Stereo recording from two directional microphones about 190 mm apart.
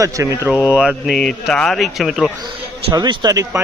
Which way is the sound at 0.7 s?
5° right (ahead or behind).